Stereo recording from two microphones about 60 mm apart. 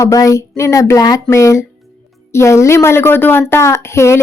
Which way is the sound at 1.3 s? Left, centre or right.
Left.